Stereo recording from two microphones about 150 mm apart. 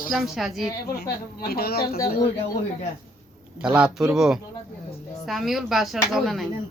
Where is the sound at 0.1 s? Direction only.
Centre (ahead or behind).